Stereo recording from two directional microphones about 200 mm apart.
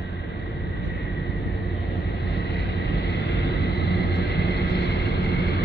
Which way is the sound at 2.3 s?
55° left (ahead or behind).